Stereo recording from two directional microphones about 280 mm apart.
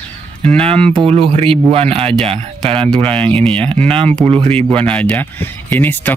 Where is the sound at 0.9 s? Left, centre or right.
Centre.